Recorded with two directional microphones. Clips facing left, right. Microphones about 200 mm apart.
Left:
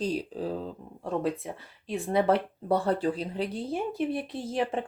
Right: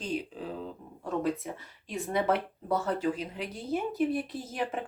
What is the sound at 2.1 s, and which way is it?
Speech, 30° left (ahead or behind).